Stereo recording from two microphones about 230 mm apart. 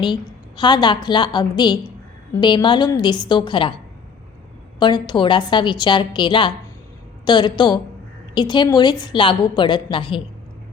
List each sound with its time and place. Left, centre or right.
0.0 s a woman's voice: centre
4.8 s a woman's voice: centre